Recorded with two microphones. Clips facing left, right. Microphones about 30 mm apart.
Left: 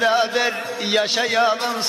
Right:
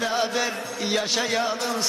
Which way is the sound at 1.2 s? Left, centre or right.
Left.